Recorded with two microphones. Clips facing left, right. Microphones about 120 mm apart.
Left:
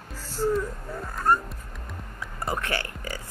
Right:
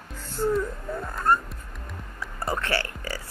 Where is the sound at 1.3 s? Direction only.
10° left (ahead or behind).